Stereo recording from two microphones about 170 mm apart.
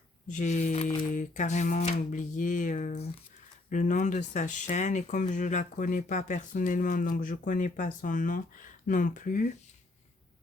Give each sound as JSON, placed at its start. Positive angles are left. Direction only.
{"t": 0.3, "sound": "speech", "side_deg": 45}